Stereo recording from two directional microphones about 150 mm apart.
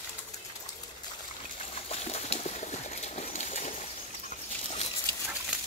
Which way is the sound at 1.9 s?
45° left (ahead or behind).